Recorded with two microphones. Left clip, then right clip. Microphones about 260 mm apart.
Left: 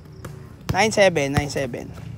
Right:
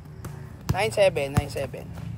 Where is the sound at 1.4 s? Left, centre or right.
Left.